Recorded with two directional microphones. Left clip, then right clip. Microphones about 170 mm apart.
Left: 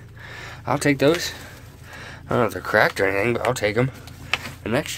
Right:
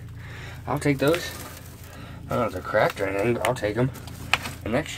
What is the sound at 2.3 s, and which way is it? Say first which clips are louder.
Speech: left 4 dB; 60° left (ahead or behind).